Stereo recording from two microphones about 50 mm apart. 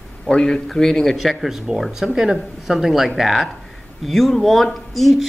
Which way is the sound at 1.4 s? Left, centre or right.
Centre.